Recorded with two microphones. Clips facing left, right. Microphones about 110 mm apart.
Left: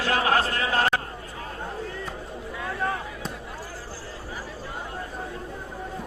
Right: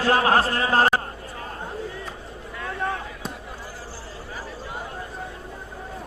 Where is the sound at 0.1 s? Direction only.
35° right (ahead or behind).